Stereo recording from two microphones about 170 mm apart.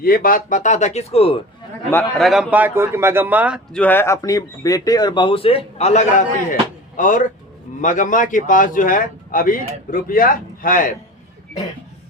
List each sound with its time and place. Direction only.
0.0 s a man's voice: 60° left (ahead or behind); by 1.4 s 35° left (ahead or behind)
2.1 s speech: centre (ahead or behind)
3.7 s a man's voice: 10° left (ahead or behind); by 10.9 s 55° left (ahead or behind)